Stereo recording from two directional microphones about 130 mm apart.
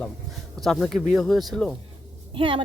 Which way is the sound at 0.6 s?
Centre (ahead or behind).